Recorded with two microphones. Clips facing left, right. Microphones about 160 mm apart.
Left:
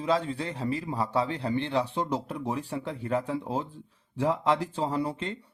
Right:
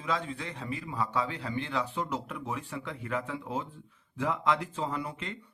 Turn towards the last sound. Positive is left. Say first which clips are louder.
# left 5 dB
turn(degrees=30)  # may be behind; listen again after turning